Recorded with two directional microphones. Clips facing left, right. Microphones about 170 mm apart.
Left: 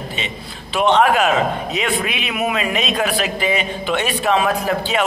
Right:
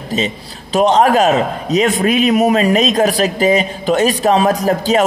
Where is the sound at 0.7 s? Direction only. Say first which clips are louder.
Right 4 dB; 40° right (ahead or behind).